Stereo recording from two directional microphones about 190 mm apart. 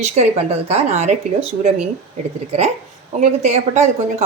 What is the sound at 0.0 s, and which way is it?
A woman's voice, 35° right (ahead or behind).